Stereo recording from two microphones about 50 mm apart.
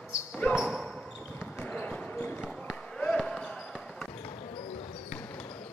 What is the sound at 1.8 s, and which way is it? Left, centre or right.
Basketball bounce, left.